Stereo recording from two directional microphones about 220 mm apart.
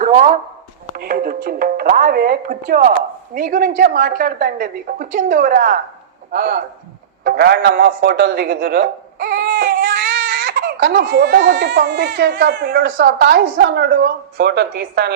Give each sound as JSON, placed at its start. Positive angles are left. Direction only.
{"t": 0.0, "sound": "a man's voice", "side_deg": -35}